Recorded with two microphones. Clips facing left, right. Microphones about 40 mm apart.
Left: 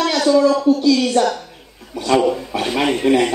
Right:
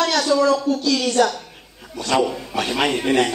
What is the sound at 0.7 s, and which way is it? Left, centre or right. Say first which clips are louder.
Speech: left 6 dB; left.